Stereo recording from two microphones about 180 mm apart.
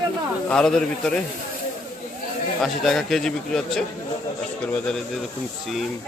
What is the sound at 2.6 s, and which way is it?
A man's voice, centre (ahead or behind).